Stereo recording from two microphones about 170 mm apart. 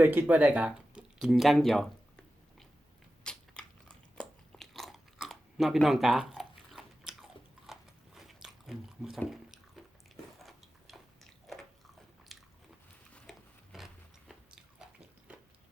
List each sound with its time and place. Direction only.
0.0 s speech: 10° right (ahead or behind)
3.2 s biting: 5° left (ahead or behind)
10.3 s a sound: centre (ahead or behind)
12.3 s biting: centre (ahead or behind)
13.3 s a sound: centre (ahead or behind)
13.7 s biting: centre (ahead or behind)